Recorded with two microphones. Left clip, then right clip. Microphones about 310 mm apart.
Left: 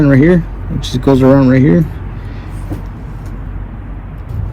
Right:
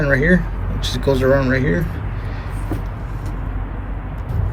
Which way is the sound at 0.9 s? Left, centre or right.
Centre.